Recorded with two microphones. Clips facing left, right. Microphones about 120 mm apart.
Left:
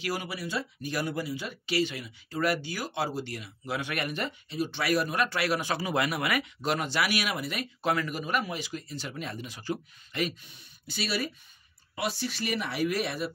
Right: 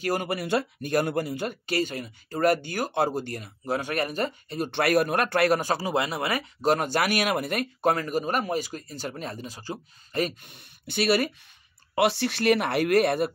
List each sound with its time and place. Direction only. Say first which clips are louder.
0.0 s speech: right 6 dB; 50° right (ahead or behind); by 10.3 s 35° right (ahead or behind)
10.4 s speech: right 5 dB; 60° right (ahead or behind)